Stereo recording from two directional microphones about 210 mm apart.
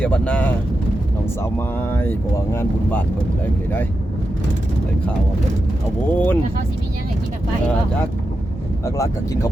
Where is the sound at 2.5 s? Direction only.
10° left (ahead or behind).